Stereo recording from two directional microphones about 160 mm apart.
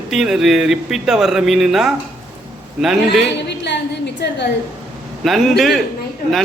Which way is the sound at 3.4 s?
90° left.